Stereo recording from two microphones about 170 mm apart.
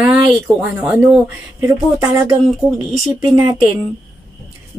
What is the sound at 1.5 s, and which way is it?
Speech, 20° right (ahead or behind).